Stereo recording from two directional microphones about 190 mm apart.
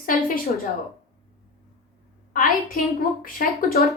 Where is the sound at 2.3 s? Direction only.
50° left (ahead or behind).